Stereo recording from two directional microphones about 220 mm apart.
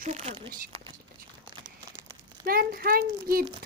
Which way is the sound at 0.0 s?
30° right (ahead or behind).